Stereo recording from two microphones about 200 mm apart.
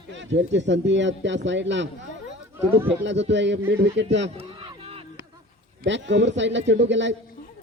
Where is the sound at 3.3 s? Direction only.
60° right (ahead or behind).